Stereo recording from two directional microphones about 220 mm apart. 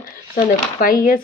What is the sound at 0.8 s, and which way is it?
Speech, 40° left (ahead or behind).